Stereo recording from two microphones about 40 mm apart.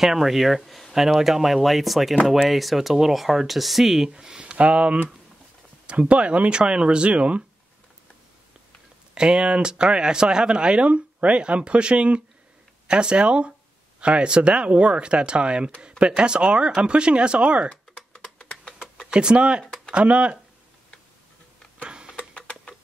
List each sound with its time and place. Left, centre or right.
0.0 s speech: centre
4.1 s speech: centre
9.1 s speech: right
18.1 s typing: left
19.0 s speech: right
21.8 s tick-tock: right
22.3 s a sound: left